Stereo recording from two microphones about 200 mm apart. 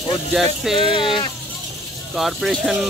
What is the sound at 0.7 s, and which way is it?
Speech, 25° left (ahead or behind).